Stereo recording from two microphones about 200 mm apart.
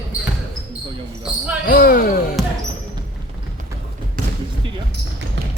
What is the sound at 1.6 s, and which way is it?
Speech, 45° left (ahead or behind).